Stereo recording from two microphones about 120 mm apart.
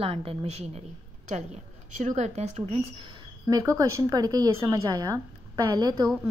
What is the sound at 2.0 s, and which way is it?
Speech, 75° right (ahead or behind).